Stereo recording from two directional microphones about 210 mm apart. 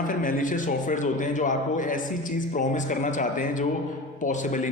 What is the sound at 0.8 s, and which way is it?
Speech, 35° left (ahead or behind).